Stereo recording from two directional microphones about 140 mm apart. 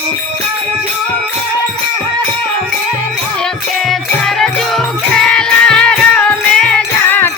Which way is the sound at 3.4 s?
Centre (ahead or behind).